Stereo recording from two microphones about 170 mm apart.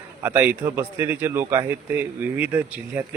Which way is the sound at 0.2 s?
10° right (ahead or behind).